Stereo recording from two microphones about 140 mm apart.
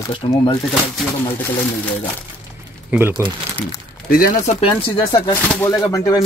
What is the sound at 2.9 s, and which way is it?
Speech, 15° right (ahead or behind).